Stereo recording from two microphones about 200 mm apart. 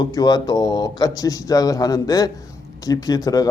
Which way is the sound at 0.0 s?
20° left (ahead or behind).